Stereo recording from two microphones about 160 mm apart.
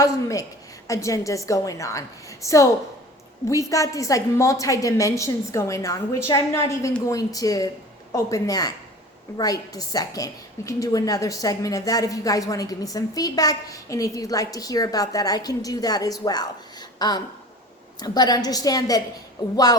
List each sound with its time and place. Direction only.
0.0 s a woman's voice: 20° left (ahead or behind)